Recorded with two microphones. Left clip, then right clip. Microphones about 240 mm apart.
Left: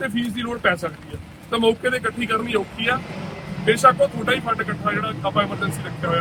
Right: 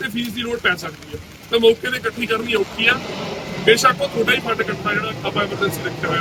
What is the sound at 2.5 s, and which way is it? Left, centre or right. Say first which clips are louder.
Speech: right 5 dB; centre.